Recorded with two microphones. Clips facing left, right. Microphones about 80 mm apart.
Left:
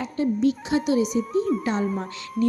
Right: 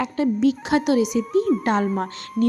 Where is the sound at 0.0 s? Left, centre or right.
Right.